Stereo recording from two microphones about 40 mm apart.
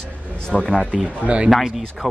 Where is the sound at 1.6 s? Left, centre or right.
Centre.